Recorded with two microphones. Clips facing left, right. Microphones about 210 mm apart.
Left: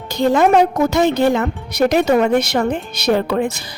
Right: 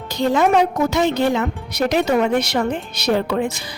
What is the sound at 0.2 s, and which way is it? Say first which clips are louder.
Speech: left 3 dB; 50° left (ahead or behind).